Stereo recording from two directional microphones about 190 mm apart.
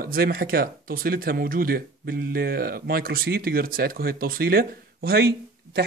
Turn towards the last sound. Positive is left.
turn(degrees=-55)  # may be behind; listen again after turning